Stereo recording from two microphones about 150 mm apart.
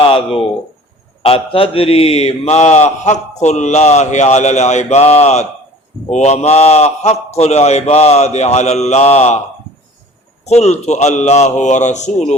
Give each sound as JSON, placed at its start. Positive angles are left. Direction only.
{"t": 1.2, "sound": "mantra", "side_deg": 40}
{"t": 10.4, "sound": "mantra", "side_deg": 50}